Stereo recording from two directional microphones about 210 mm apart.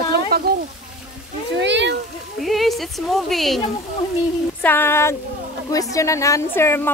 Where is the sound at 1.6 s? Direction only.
55° right (ahead or behind).